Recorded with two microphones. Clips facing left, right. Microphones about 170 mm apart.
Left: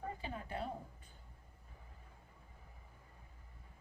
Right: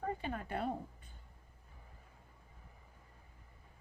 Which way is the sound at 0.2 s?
60° right (ahead or behind).